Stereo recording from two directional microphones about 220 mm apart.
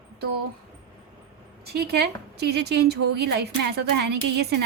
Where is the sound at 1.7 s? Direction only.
45° right (ahead or behind).